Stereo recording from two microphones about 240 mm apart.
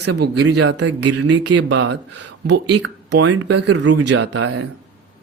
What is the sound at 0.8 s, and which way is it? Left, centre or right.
Speech, right.